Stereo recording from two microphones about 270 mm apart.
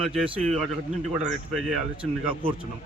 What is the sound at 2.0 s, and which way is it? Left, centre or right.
Speech, centre.